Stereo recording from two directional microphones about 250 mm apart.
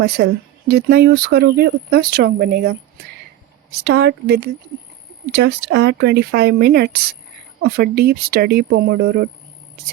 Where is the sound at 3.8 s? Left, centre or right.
Right.